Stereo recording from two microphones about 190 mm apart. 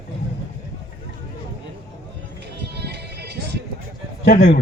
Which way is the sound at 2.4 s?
60° right (ahead or behind).